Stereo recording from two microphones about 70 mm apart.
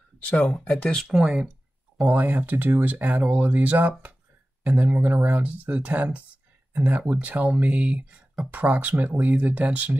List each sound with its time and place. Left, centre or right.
0.3 s speech: centre
1.1 s speech: centre
2.0 s speech: right